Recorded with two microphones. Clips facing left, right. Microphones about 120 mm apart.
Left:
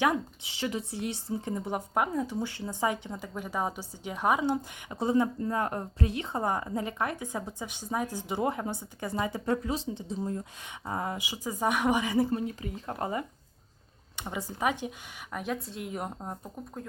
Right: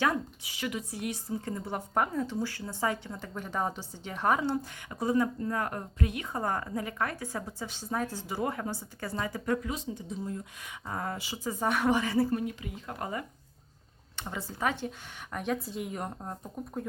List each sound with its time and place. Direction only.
0.0 s speech: 15° left (ahead or behind)
0.5 s a woman's voice: 30° left (ahead or behind)
14.2 s speech: 15° left (ahead or behind)
15.3 s speech: centre (ahead or behind)